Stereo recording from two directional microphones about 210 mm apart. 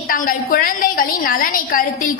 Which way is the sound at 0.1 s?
40° left (ahead or behind).